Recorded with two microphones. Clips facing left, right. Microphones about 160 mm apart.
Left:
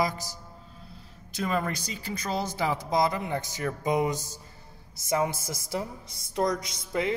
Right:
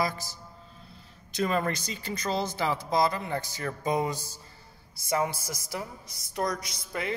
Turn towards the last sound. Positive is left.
turn(degrees=20)  # may be behind; listen again after turning